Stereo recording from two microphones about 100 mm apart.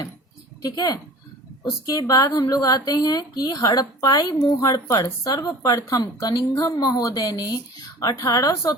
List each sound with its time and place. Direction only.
0.6 s speech: 40° left (ahead or behind)